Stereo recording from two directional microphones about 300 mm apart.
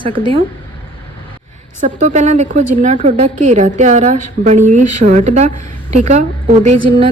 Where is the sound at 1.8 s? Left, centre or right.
Right.